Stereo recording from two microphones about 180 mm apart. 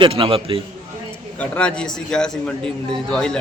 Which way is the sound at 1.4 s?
5° left (ahead or behind).